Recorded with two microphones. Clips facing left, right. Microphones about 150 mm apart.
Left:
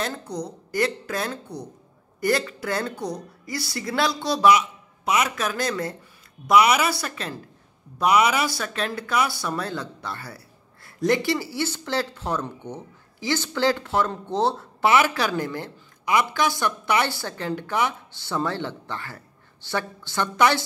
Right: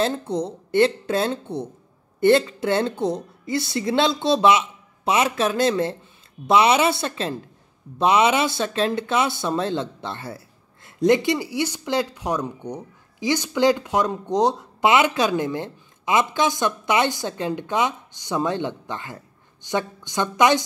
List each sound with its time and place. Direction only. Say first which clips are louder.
0.0 s a woman's voice: right 7 dB; 25° right (ahead or behind)